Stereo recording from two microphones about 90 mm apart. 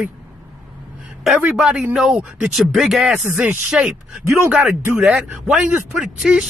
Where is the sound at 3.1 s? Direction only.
15° right (ahead or behind).